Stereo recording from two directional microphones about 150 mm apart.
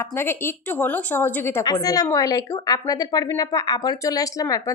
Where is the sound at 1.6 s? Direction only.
25° left (ahead or behind).